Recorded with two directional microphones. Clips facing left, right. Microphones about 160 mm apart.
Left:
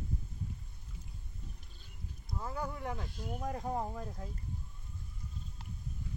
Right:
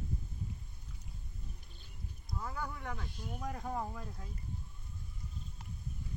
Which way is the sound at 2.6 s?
30° left (ahead or behind).